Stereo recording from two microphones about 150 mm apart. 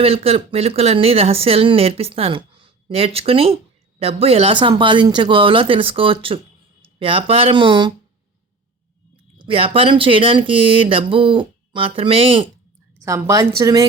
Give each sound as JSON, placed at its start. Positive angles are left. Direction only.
{"t": 0.0, "sound": "speech", "side_deg": -40}
{"t": 9.4, "sound": "speech", "side_deg": -40}
{"t": 13.1, "sound": "a woman's voice", "side_deg": -20}